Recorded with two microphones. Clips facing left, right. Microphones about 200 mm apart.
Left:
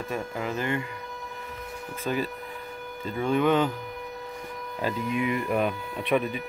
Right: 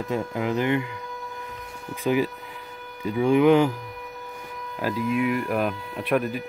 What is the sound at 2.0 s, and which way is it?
Speech, 15° right (ahead or behind).